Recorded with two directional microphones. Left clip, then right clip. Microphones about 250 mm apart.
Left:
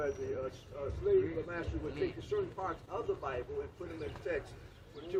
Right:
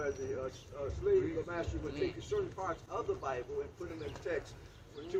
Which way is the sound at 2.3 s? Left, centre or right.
Centre.